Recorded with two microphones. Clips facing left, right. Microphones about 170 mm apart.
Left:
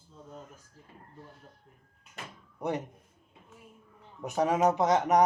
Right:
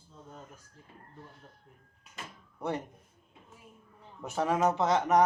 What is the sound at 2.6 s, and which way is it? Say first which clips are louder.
Speech: left 2 dB; 15° left (ahead or behind).